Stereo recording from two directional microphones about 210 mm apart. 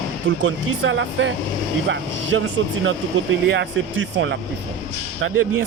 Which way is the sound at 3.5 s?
60° right (ahead or behind).